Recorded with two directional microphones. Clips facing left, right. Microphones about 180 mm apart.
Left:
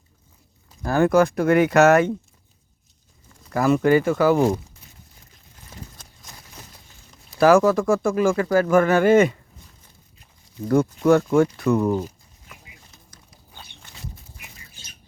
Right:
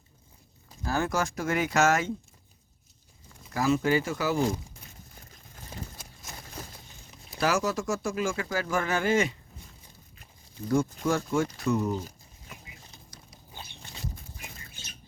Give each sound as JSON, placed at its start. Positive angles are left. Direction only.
{"t": 0.8, "sound": "speech", "side_deg": 60}
{"t": 3.5, "sound": "speech", "side_deg": 60}
{"t": 7.3, "sound": "speech", "side_deg": 55}
{"t": 10.7, "sound": "speech", "side_deg": 65}